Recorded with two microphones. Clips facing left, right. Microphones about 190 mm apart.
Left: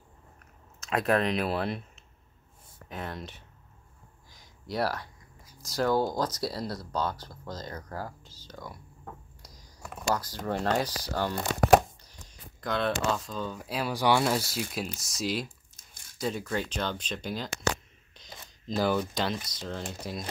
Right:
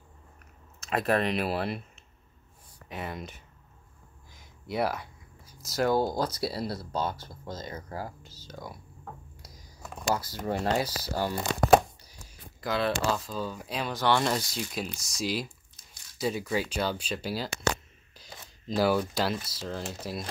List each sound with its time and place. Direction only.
0.8 s speech: centre (ahead or behind)
2.9 s speech: 5° right (ahead or behind)
4.3 s a sound: 5° right (ahead or behind)
5.6 s speech: 5° right (ahead or behind)
7.1 s speech: 25° right (ahead or behind)
7.7 s speech: 10° right (ahead or behind)
9.4 s a sound: 5° right (ahead or behind)
11.1 s speech: 10° right (ahead or behind)
15.4 s a sound: 50° left (ahead or behind)
16.2 s speech: 5° right (ahead or behind)
18.8 s speech: 5° right (ahead or behind)